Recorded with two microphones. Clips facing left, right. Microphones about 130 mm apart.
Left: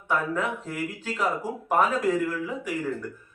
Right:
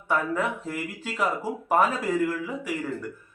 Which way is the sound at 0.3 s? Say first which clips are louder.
Right 1 dB; 10° right (ahead or behind).